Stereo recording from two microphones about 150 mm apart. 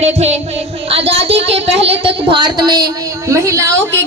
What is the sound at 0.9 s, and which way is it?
A woman's voice, 40° right (ahead or behind).